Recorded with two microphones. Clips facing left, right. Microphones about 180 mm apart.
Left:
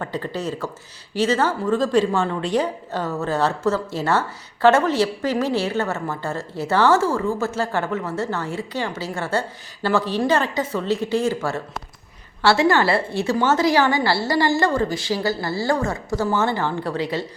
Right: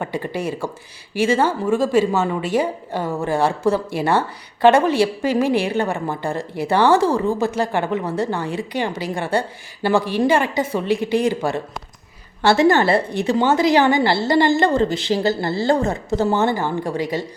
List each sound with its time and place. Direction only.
0.0 s a woman's voice: 15° right (ahead or behind)